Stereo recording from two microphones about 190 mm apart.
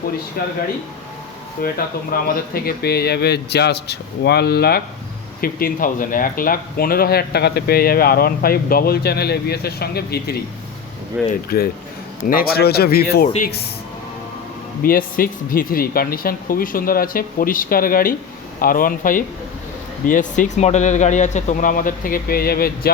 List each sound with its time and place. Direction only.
0.4 s speech: 50° left (ahead or behind)
1.6 s speech: 50° left (ahead or behind)
11.4 s speech: 55° left (ahead or behind)
14.8 s speech: 50° left (ahead or behind)